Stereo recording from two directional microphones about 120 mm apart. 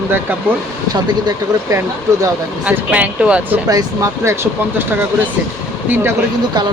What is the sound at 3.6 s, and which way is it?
Speech, 30° right (ahead or behind).